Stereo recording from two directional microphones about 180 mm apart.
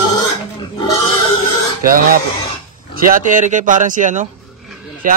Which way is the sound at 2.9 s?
50° right (ahead or behind).